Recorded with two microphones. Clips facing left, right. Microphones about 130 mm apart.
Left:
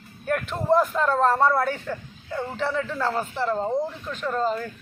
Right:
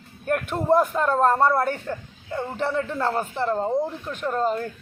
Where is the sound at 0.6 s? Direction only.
10° right (ahead or behind).